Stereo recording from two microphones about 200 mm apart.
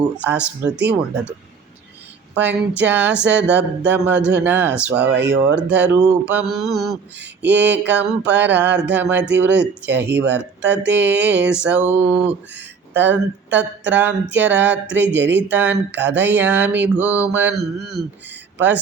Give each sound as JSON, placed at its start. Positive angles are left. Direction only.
{"t": 0.2, "sound": "speech", "side_deg": -5}
{"t": 2.8, "sound": "speech", "side_deg": -10}
{"t": 15.2, "sound": "speech", "side_deg": -60}
{"t": 15.4, "sound": "speech", "side_deg": -10}